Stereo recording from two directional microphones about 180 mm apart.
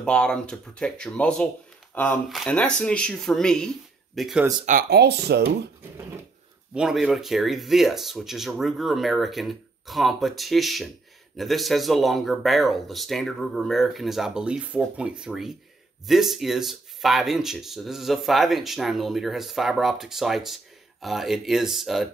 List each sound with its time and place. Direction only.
0.0 s speech: 5° left (ahead or behind)
4.8 s speech: 65° right (ahead or behind)
6.7 s speech: 5° right (ahead or behind)